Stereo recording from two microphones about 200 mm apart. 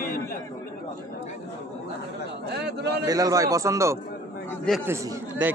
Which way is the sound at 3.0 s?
15° right (ahead or behind).